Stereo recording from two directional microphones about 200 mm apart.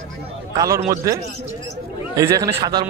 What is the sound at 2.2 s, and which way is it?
Speech, 15° right (ahead or behind).